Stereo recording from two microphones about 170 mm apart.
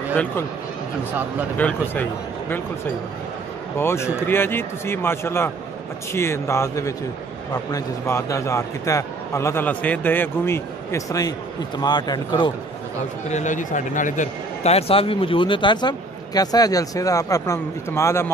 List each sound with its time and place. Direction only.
0.1 s a man's voice: 10° left (ahead or behind)
1.6 s a man's voice: 10° left (ahead or behind)
3.7 s a man's voice: 15° left (ahead or behind)
13.3 s a man's voice: 45° left (ahead or behind); by 18.3 s 15° left (ahead or behind)